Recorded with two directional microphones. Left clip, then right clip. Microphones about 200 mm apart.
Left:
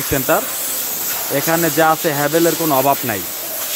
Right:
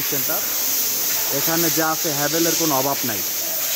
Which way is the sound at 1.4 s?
15° left (ahead or behind).